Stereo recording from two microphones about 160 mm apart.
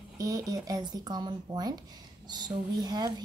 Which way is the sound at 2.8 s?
25° right (ahead or behind).